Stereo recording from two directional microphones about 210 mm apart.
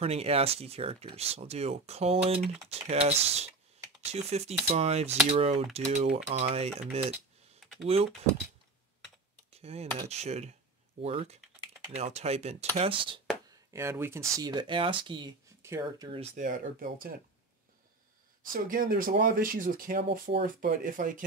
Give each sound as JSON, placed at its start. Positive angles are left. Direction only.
{"t": 0.0, "sound": "speech", "side_deg": -30}
{"t": 9.5, "sound": "a sound", "side_deg": -30}
{"t": 10.0, "sound": "speech", "side_deg": -30}
{"t": 13.7, "sound": "speech", "side_deg": -10}
{"t": 16.2, "sound": "speech", "side_deg": -35}
{"t": 18.5, "sound": "speech", "side_deg": -40}